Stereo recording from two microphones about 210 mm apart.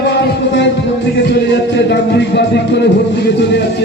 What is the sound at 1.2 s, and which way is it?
Speech, 55° left (ahead or behind).